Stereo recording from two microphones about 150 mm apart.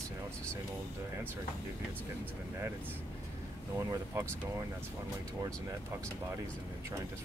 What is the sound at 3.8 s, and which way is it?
Speech, 20° right (ahead or behind).